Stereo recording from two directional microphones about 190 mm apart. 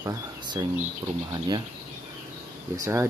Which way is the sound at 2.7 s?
15° right (ahead or behind).